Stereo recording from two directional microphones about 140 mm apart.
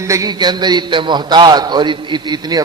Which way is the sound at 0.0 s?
25° right (ahead or behind).